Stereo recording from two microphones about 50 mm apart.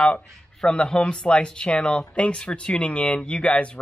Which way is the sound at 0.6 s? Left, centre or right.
Centre.